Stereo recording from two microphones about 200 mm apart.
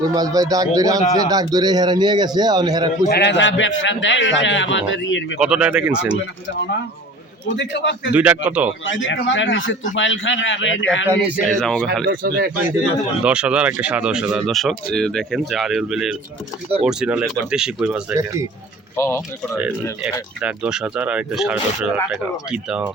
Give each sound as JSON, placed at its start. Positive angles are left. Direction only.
{"t": 0.0, "sound": "a man's voice", "side_deg": -20}
{"t": 3.1, "sound": "a man's voice", "side_deg": 60}
{"t": 5.4, "sound": "speech", "side_deg": -5}
{"t": 7.5, "sound": "a man's voice", "side_deg": 60}
{"t": 8.1, "sound": "a man's voice", "side_deg": -5}
{"t": 8.9, "sound": "a man's voice", "side_deg": 70}
{"t": 11.4, "sound": "speech", "side_deg": 5}
{"t": 12.0, "sound": "speech", "side_deg": -45}
{"t": 13.2, "sound": "speech", "side_deg": -5}
{"t": 18.9, "sound": "speech", "side_deg": 15}
{"t": 20.4, "sound": "speech", "side_deg": -5}